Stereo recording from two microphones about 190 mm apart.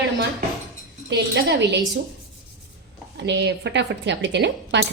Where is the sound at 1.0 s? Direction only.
65° right (ahead or behind).